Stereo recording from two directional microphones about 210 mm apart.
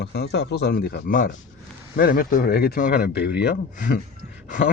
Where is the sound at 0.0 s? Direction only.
50° left (ahead or behind).